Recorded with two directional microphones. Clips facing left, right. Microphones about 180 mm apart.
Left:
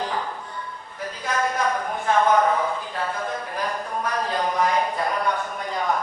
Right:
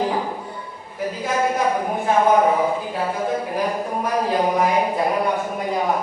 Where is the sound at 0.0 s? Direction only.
10° right (ahead or behind).